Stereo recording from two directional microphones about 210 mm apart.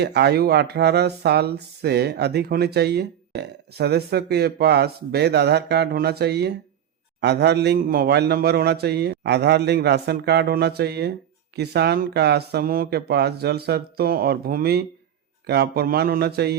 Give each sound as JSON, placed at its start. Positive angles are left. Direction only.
{"t": 0.0, "sound": "speech", "side_deg": -50}